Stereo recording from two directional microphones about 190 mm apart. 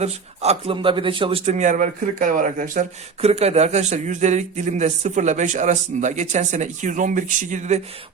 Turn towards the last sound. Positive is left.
turn(degrees=-40)  # may be behind; listen again after turning